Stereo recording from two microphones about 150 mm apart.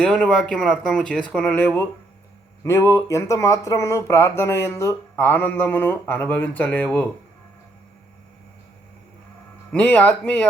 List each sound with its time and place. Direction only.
0.0 s speech: 5° left (ahead or behind)
9.7 s speech: 10° left (ahead or behind)